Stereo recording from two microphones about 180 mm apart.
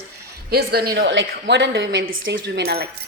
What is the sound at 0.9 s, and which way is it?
A woman's voice, 85° right.